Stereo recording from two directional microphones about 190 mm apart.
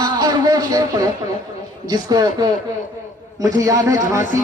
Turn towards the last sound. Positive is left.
turn(degrees=-15)  # may be behind; listen again after turning